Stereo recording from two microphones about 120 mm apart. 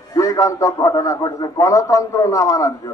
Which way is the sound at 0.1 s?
30° left (ahead or behind).